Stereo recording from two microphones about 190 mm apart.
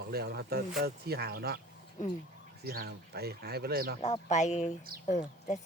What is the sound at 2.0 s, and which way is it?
Speech, 40° left (ahead or behind).